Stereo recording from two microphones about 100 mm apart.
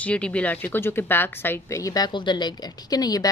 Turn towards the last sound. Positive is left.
turn(degrees=40)  # may be behind; listen again after turning